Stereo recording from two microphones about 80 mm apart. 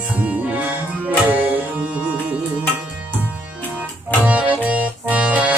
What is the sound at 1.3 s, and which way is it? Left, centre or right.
Tabla, right.